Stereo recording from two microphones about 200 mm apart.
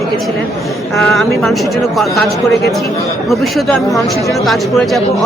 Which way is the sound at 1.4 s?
Centre (ahead or behind).